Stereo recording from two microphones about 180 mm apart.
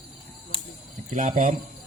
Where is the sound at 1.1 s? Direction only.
45° right (ahead or behind).